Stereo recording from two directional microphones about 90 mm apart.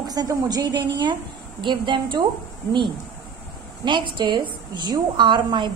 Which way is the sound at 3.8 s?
60° right (ahead or behind).